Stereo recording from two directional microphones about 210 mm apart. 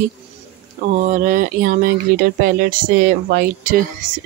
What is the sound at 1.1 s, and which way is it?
Speech, 40° right (ahead or behind).